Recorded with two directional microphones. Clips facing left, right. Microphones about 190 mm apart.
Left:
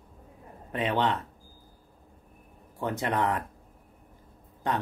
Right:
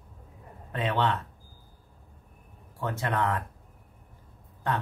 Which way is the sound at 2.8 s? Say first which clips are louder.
Left 1 dB; 15° left (ahead or behind).